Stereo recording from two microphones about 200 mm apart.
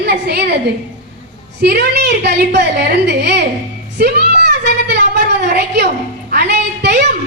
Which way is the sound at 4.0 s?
55° right (ahead or behind).